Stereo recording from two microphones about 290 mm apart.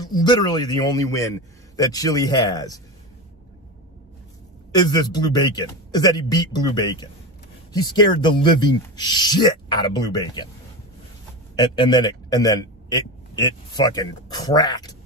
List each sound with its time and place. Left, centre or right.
0.0 s speech: centre
4.7 s speech: centre
11.5 s a man's voice: centre